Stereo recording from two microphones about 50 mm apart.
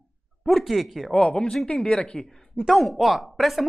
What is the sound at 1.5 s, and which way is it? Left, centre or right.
Speech, centre.